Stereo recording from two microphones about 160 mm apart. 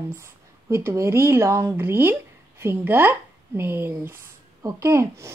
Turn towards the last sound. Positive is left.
turn(degrees=-15)  # may be behind; listen again after turning